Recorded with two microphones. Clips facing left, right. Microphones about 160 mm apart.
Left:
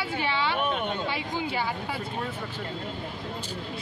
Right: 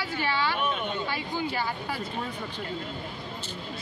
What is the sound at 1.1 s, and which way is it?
Speech, 25° left (ahead or behind).